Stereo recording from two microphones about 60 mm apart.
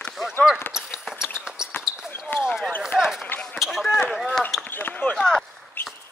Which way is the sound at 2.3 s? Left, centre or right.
Left.